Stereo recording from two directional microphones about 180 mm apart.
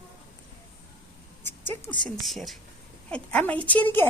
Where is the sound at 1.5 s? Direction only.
10° left (ahead or behind).